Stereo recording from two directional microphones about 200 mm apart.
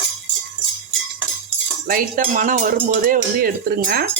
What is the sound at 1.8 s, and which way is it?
Speech, 45° right (ahead or behind).